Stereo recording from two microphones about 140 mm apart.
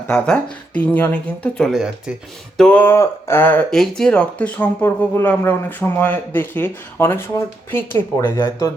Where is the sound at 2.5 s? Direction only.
10° left (ahead or behind).